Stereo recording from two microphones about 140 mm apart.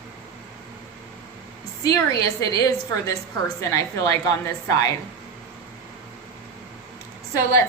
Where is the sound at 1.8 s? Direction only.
25° left (ahead or behind).